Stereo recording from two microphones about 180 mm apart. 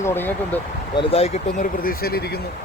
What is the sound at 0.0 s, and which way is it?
Speech, 10° left (ahead or behind).